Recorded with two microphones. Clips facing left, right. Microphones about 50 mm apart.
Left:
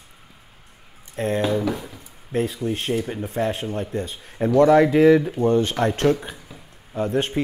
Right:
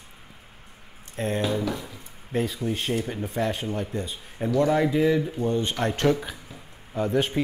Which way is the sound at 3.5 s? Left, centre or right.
Left.